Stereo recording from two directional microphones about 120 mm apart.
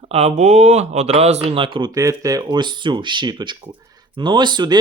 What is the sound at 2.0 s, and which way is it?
Speech, 30° right (ahead or behind).